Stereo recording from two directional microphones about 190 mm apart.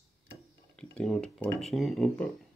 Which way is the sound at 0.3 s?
5° left (ahead or behind).